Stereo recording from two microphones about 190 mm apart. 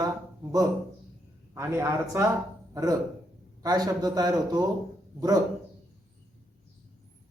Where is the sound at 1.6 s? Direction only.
15° right (ahead or behind).